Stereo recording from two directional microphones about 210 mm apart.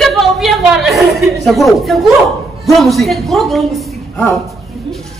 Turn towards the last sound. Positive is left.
turn(degrees=0)  # may be behind; listen again after turning